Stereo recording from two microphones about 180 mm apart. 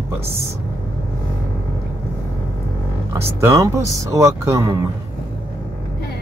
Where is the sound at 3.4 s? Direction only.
15° right (ahead or behind).